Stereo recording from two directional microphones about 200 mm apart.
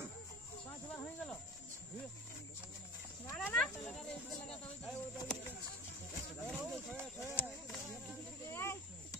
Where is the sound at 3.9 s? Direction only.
Centre (ahead or behind).